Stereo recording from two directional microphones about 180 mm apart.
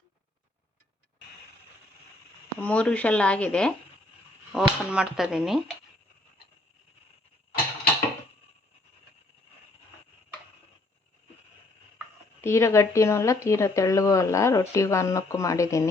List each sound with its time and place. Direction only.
2.6 s speech: 5° left (ahead or behind)
12.4 s speech: 15° left (ahead or behind)